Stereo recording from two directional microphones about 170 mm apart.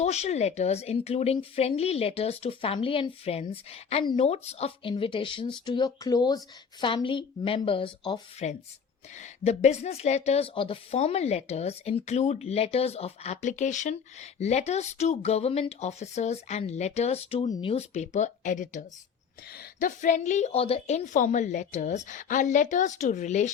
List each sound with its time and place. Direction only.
0.0 s a woman's voice: 40° left (ahead or behind)
8.4 s a woman's voice: 40° left (ahead or behind)